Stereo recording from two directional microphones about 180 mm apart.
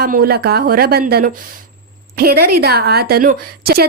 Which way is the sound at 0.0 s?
55° right (ahead or behind).